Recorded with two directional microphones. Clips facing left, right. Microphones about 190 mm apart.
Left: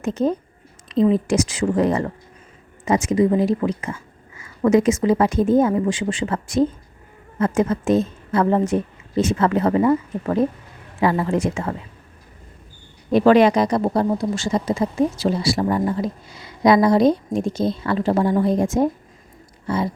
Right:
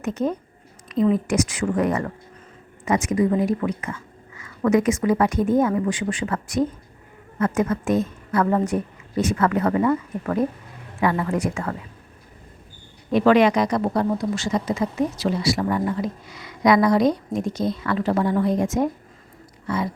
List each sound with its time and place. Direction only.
0.0 s speech: 30° left (ahead or behind)
13.1 s speech: 35° left (ahead or behind)